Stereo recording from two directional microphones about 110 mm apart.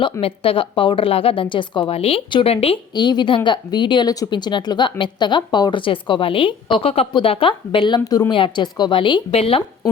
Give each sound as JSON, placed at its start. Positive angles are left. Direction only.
{"t": 0.0, "sound": "a woman's voice", "side_deg": 60}
{"t": 2.0, "sound": "a woman's voice", "side_deg": 60}
{"t": 2.9, "sound": "speech", "side_deg": 40}
{"t": 8.3, "sound": "speech", "side_deg": 45}
{"t": 9.3, "sound": "a woman's voice", "side_deg": 65}